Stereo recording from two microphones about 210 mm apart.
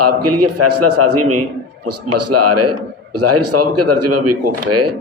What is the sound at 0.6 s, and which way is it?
A man's voice, 90° right.